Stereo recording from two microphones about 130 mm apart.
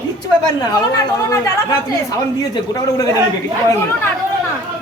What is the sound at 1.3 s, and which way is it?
Speech, 25° left (ahead or behind).